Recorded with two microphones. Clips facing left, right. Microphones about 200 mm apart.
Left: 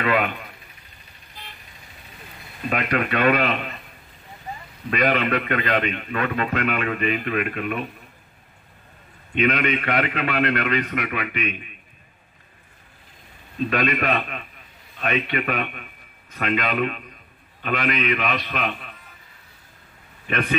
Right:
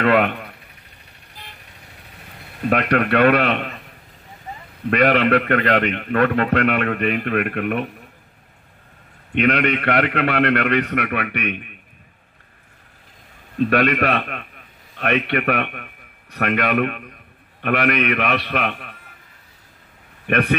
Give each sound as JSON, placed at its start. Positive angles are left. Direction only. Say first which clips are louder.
{"t": 0.0, "sound": "a man's voice", "louder": "right 5 dB", "side_deg": -65}
{"t": 2.7, "sound": "a man's voice", "louder": "right 5 dB", "side_deg": -65}
{"t": 4.8, "sound": "a man's voice", "louder": "right 5 dB", "side_deg": -65}
{"t": 9.4, "sound": "a man's voice", "louder": "right 3 dB", "side_deg": -65}
{"t": 13.6, "sound": "a man's voice", "louder": "right 5 dB", "side_deg": -65}
{"t": 20.2, "sound": "a man's voice", "louder": "right 6 dB", "side_deg": -60}